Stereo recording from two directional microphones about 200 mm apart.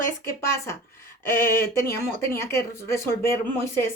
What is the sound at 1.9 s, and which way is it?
Dishes, 15° left (ahead or behind).